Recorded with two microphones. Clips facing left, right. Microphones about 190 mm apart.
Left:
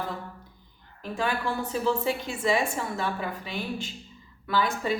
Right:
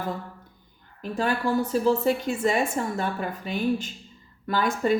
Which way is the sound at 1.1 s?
40° right (ahead or behind).